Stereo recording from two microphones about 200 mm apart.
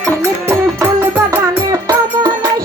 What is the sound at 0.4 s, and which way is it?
Music, 10° right (ahead or behind).